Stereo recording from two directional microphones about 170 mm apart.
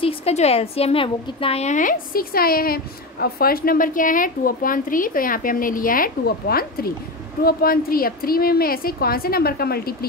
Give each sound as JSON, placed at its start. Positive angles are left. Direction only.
{"t": 0.0, "sound": "a woman's voice", "side_deg": 35}